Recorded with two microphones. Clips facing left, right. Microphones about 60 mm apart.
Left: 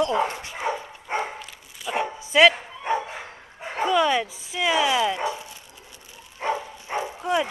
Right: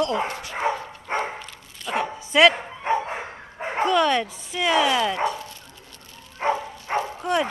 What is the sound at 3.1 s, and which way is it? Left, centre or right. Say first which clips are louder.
Bow-wow: right 5 dB; right.